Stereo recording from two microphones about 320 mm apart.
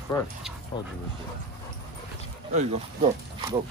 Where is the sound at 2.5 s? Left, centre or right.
Right.